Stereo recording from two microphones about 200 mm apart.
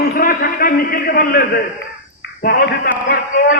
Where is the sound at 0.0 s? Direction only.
50° left (ahead or behind).